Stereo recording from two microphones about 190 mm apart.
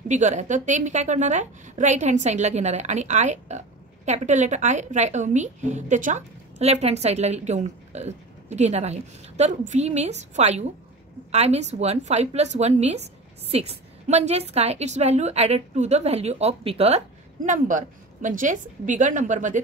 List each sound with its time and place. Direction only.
0.1 s a woman's voice: 40° right (ahead or behind)